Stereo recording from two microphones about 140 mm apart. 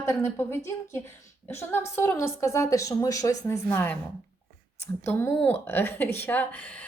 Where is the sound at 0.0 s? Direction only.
20° left (ahead or behind).